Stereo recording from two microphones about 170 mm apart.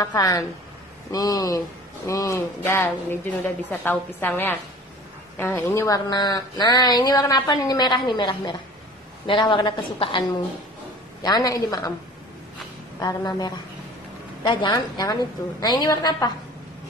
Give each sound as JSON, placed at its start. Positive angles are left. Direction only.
{"t": 0.0, "sound": "speech", "side_deg": 20}
{"t": 11.2, "sound": "speech", "side_deg": 20}
{"t": 13.0, "sound": "speech", "side_deg": 25}